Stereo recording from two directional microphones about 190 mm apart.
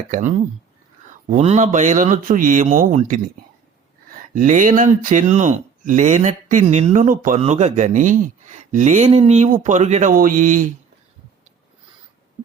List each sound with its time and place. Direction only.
0.1 s speech: 40° right (ahead or behind)
4.4 s speech: 45° right (ahead or behind)